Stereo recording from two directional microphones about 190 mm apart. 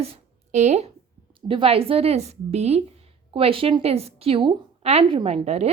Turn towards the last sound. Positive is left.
turn(degrees=-35)  # may be behind; listen again after turning